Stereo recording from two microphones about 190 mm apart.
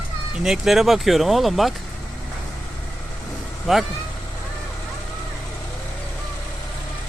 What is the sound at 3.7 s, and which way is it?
Speech, centre (ahead or behind).